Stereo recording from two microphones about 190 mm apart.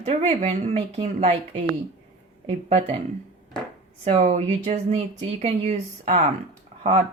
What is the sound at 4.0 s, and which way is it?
A woman's voice, 35° right (ahead or behind).